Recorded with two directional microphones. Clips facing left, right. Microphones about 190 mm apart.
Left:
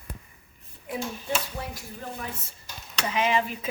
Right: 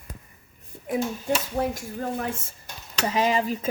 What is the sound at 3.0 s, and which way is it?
Speech, 40° right (ahead or behind).